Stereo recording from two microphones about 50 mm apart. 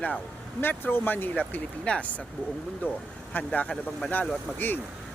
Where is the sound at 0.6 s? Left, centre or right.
Left.